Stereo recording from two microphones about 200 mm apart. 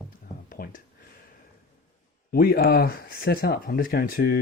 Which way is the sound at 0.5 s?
45° left (ahead or behind).